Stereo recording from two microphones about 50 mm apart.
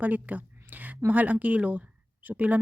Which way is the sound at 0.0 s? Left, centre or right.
Right.